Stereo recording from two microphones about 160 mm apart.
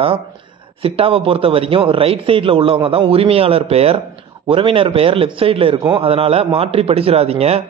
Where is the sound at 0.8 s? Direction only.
35° right (ahead or behind).